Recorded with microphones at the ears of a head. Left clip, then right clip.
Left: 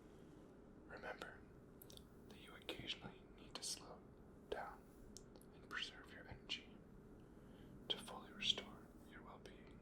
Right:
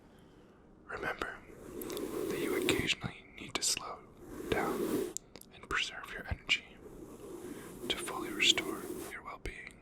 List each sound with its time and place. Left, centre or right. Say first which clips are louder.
0.9 s whispering: right 14 dB; right